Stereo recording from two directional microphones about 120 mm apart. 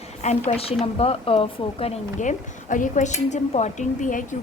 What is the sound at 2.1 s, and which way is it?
Speech, 90° left.